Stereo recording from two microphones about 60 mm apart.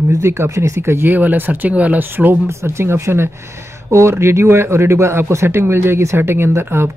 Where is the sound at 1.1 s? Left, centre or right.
Right.